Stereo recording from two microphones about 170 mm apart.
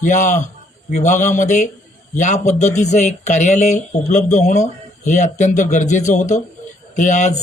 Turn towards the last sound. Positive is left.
turn(degrees=45)  # may be behind; listen again after turning